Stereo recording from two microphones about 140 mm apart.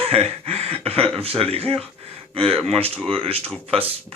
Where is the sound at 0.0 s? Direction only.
45° right (ahead or behind).